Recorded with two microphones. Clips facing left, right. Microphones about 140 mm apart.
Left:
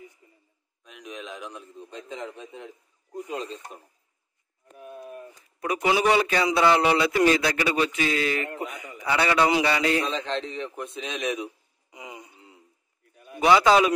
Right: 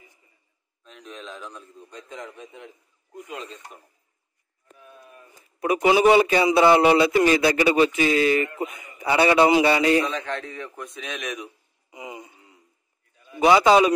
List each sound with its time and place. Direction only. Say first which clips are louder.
0.8 s a man's voice: left 1 dB; 10° left (ahead or behind); by 3.6 s 35° left (ahead or behind)
4.7 s a sound: left 9 dB; 50° left (ahead or behind)
5.6 s speech: right 5 dB; 10° right (ahead or behind)
10.0 s a man's voice: even; 25° left (ahead or behind)
11.9 s wail: right 4 dB; 5° right (ahead or behind)
13.6 s speech: right 3 dB; 5° right (ahead or behind)